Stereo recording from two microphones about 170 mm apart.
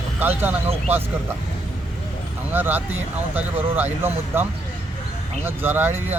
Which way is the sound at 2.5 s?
10° right (ahead or behind).